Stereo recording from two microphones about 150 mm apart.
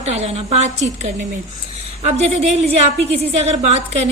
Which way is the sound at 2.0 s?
45° right (ahead or behind).